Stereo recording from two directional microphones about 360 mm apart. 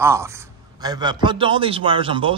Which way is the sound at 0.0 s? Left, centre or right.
Centre.